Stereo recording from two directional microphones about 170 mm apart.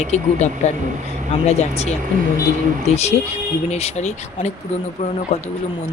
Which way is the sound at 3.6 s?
40° left (ahead or behind).